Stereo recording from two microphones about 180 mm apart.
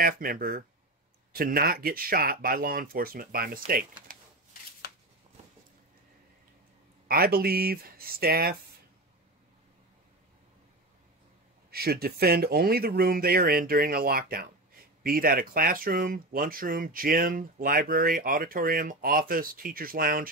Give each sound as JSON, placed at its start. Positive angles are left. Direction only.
{"t": 0.0, "sound": "speech", "side_deg": -55}
{"t": 7.1, "sound": "speech", "side_deg": -55}
{"t": 11.7, "sound": "speech", "side_deg": -60}